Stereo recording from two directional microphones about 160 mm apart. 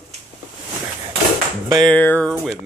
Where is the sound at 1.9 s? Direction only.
10° left (ahead or behind).